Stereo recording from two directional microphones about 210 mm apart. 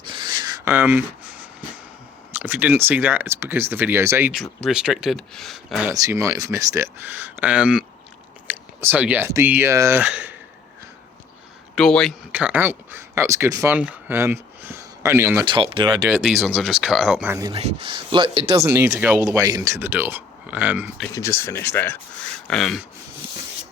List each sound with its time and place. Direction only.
0.1 s rub: 20° right (ahead or behind)
2.3 s speech: 10° right (ahead or behind)
5.9 s speech: 15° right (ahead or behind)
11.7 s speech: centre (ahead or behind)
15.4 s speech: 25° right (ahead or behind)
16.0 s speech: centre (ahead or behind)
17.5 s speech: 30° right (ahead or behind); by 20.9 s 10° right (ahead or behind)
21.1 s speech: 15° left (ahead or behind)